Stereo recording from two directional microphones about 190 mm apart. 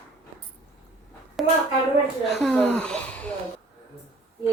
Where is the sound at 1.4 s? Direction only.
Centre (ahead or behind).